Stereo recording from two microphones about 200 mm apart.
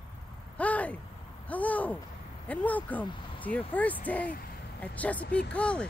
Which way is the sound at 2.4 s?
10° left (ahead or behind).